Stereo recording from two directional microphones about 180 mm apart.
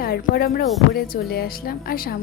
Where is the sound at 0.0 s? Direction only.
55° left (ahead or behind).